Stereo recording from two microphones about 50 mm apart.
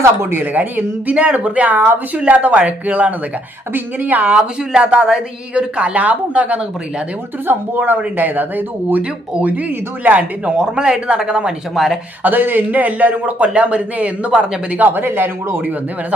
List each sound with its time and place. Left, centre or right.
0.0 s speech: right
0.4 s speech: right
4.4 s speech: right
7.4 s speech: right
10.6 s speech: centre
11.7 s speech: centre
12.2 s speech: right